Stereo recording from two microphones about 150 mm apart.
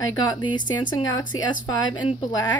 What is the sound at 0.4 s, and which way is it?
A woman's voice, 30° left (ahead or behind).